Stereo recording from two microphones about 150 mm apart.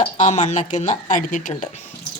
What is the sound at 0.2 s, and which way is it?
Speech, 55° left (ahead or behind).